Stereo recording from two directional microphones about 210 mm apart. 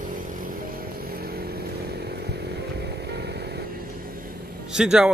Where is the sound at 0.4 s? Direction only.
45° right (ahead or behind).